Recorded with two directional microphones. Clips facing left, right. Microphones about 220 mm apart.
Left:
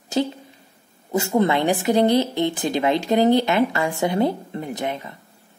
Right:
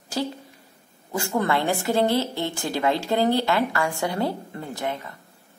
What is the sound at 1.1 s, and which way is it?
A woman's voice, 20° left (ahead or behind).